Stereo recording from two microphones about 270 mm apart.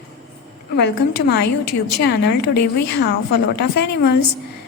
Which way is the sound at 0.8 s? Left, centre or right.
Left.